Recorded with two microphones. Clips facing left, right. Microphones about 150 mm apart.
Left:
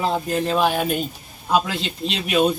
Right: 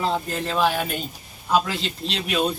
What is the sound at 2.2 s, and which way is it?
Speech, 15° left (ahead or behind).